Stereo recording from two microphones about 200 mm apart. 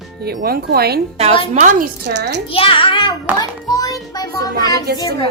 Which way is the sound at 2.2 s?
60° right (ahead or behind).